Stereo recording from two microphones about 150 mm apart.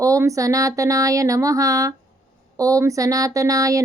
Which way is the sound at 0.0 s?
20° right (ahead or behind).